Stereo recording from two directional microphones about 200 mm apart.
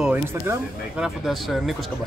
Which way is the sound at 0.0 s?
5° right (ahead or behind).